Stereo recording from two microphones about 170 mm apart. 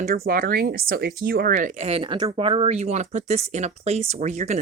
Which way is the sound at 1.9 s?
35° right (ahead or behind).